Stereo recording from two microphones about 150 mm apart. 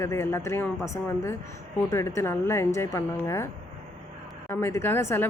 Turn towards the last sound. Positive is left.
turn(degrees=15)  # may be behind; listen again after turning